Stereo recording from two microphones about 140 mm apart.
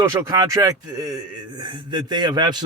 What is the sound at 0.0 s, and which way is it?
A man's voice, 20° right (ahead or behind).